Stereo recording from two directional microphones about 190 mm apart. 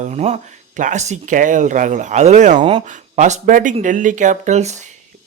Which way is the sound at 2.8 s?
40° right (ahead or behind).